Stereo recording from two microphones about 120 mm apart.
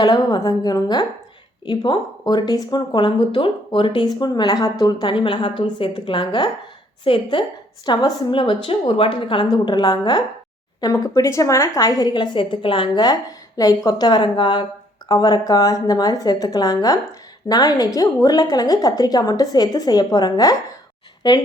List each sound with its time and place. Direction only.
0.0 s a woman's voice: 35° left (ahead or behind)
4.0 s a woman's voice: 35° left (ahead or behind)